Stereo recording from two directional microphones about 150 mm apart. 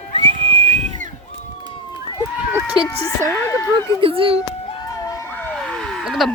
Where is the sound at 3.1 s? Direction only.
20° left (ahead or behind).